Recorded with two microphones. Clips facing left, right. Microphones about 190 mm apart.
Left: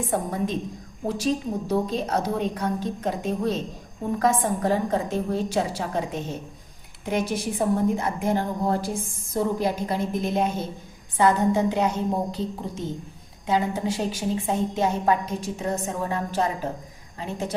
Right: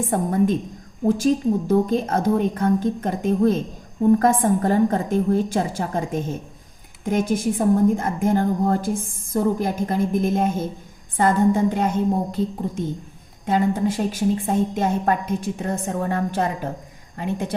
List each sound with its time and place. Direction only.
0.0 s a woman's voice: 50° right (ahead or behind)